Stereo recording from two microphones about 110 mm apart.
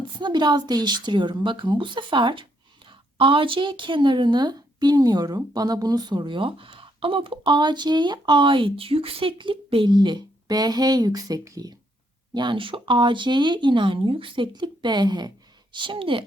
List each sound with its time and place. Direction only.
0.2 s a woman's voice: 45° right (ahead or behind)
12.3 s a woman's voice: 45° right (ahead or behind)